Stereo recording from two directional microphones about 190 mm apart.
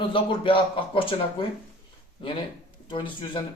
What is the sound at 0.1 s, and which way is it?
Speech, 25° left (ahead or behind).